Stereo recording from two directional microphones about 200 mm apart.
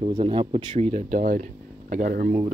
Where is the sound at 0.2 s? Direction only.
30° right (ahead or behind).